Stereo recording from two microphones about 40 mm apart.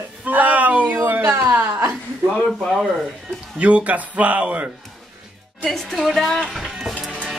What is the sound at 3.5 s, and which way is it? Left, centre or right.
Speech, right.